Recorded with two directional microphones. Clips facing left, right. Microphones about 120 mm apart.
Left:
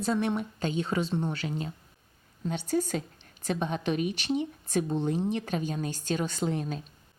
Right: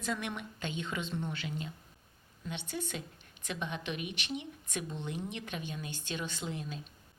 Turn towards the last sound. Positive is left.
turn(degrees=45)  # may be behind; listen again after turning